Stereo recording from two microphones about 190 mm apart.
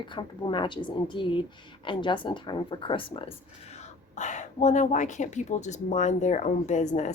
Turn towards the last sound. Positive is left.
turn(degrees=40)  # may be behind; listen again after turning